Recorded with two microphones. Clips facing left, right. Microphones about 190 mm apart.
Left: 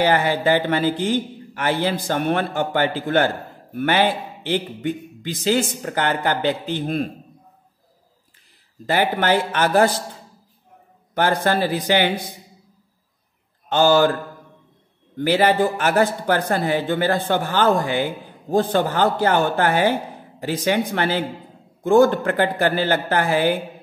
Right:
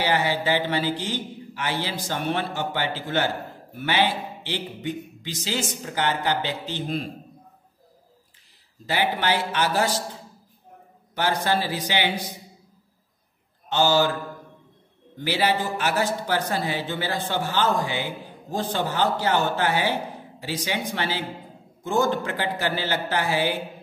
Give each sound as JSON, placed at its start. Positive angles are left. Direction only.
{"t": 0.0, "sound": "a man's voice", "side_deg": 50}
{"t": 8.8, "sound": "a man's voice", "side_deg": 50}
{"t": 11.1, "sound": "a man's voice", "side_deg": 50}
{"t": 13.7, "sound": "a man's voice", "side_deg": 55}
{"t": 15.1, "sound": "a man's voice", "side_deg": 50}